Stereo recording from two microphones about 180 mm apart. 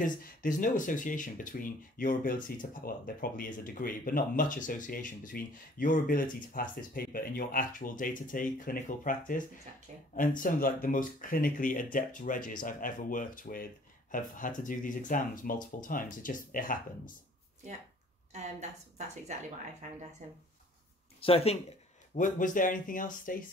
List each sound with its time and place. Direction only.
0.0 s speech: 45° left (ahead or behind)
18.3 s a woman's voice: 40° right (ahead or behind)
21.2 s speech: 35° left (ahead or behind); by 23.4 s 50° left (ahead or behind)